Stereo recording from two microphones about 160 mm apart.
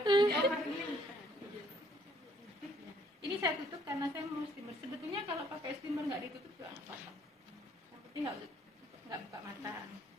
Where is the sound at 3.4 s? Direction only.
20° right (ahead or behind).